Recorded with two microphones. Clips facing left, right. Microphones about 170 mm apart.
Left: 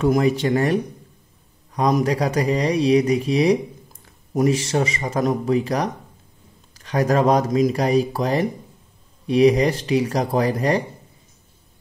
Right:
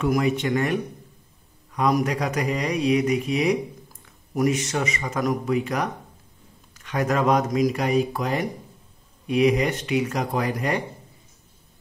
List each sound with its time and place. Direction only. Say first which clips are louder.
0.0 s speech: left 4 dB; 35° left (ahead or behind)
1.9 s speech: left 3 dB; 30° left (ahead or behind)